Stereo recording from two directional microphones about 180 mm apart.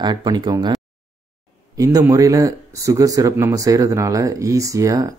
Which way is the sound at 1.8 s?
20° right (ahead or behind).